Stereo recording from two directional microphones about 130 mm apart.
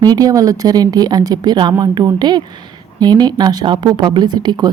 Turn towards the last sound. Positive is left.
turn(degrees=-35)  # may be behind; listen again after turning